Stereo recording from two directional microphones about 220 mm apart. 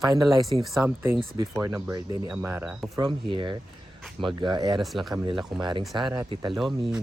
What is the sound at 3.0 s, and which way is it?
Speech, 20° right (ahead or behind).